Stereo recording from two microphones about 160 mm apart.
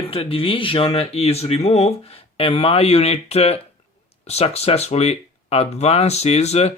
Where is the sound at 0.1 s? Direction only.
35° left (ahead or behind).